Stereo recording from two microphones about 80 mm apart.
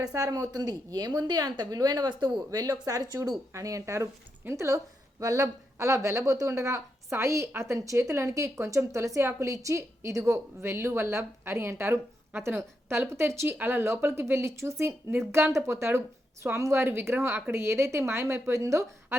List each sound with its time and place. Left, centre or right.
0.0 s a woman's voice: right
0.6 s a woman's voice: right